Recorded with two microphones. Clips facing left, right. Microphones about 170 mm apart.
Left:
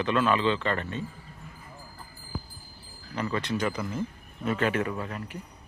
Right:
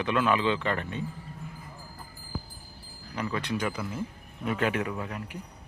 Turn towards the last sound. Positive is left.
turn(degrees=-10)  # may be behind; listen again after turning